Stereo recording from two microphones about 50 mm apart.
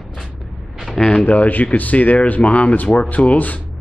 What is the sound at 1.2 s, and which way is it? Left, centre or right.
A man's voice, left.